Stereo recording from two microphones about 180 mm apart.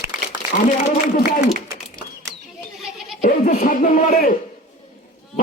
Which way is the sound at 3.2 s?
45° left (ahead or behind).